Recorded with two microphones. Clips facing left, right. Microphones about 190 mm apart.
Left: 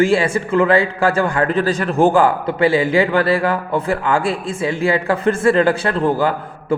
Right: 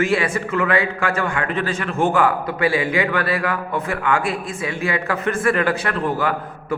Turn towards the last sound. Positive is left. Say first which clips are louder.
# left 4 dB
turn(degrees=30)  # may be behind; listen again after turning